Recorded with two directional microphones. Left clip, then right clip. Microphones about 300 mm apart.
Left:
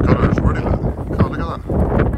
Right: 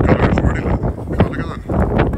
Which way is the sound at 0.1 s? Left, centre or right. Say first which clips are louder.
Right 2 dB; centre.